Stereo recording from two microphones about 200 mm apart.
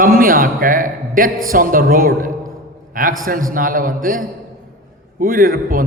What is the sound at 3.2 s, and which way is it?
A man's voice, 45° right (ahead or behind).